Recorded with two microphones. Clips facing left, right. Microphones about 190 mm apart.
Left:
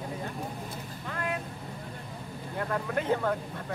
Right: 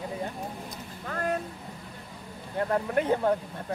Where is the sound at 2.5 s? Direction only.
30° right (ahead or behind).